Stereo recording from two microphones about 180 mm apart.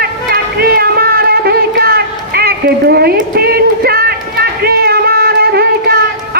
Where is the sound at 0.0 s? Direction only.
60° right (ahead or behind).